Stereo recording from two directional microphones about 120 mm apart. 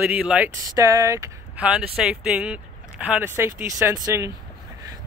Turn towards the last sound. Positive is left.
turn(degrees=-25)  # may be behind; listen again after turning